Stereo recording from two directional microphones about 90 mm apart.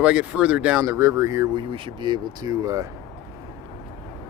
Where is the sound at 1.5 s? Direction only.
60° right (ahead or behind).